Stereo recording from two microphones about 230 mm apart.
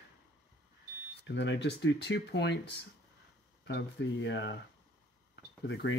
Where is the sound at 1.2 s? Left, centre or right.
Left.